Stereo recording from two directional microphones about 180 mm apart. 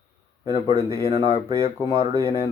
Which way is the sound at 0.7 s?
15° right (ahead or behind).